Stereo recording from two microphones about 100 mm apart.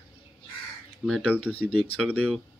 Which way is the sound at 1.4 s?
15° left (ahead or behind).